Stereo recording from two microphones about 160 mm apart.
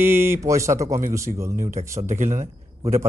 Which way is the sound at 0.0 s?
15° right (ahead or behind).